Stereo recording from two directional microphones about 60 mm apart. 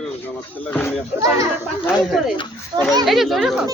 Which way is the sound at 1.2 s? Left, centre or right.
Right.